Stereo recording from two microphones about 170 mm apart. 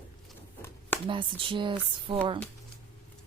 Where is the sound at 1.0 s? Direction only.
30° right (ahead or behind).